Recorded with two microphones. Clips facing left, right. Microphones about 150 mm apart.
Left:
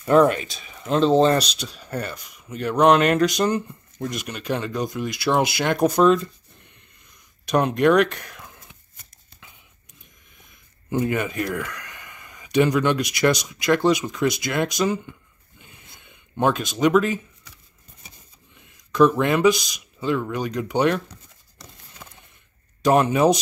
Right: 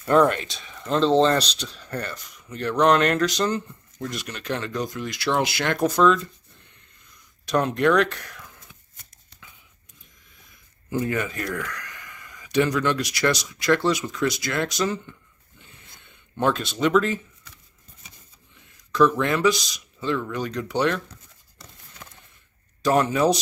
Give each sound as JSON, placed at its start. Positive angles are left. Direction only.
{"t": 0.0, "sound": "speech", "side_deg": 5}
{"t": 7.4, "sound": "speech", "side_deg": 15}
{"t": 10.9, "sound": "speech", "side_deg": 20}
{"t": 16.3, "sound": "speech", "side_deg": 15}
{"t": 18.9, "sound": "speech", "side_deg": 15}
{"t": 22.8, "sound": "speech", "side_deg": 20}